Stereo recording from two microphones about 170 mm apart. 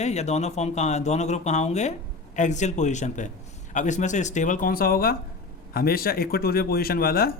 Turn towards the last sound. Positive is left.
turn(degrees=60)  # may be behind; listen again after turning